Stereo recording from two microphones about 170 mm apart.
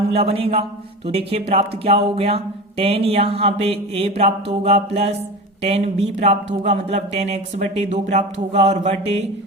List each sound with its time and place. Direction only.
0.1 s speech: 35° right (ahead or behind)